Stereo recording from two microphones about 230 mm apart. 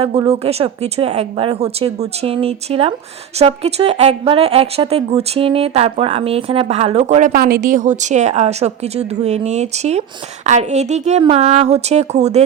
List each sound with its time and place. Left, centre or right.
0.0 s a woman's voice: right